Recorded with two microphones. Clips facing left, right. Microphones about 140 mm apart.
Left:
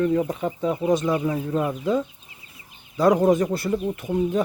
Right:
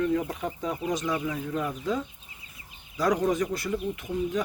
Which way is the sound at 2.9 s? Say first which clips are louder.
Left 7 dB; 30° left (ahead or behind).